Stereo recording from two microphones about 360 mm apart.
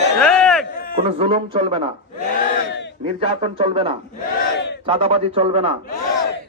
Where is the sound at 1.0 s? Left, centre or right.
Centre.